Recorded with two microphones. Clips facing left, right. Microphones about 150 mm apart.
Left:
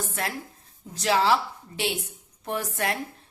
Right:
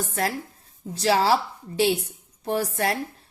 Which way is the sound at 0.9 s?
35° right (ahead or behind).